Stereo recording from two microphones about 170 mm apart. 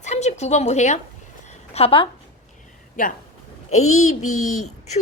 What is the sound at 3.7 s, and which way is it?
Speech, 40° left (ahead or behind).